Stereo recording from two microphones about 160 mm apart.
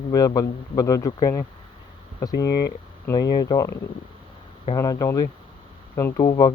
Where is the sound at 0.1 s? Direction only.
20° left (ahead or behind).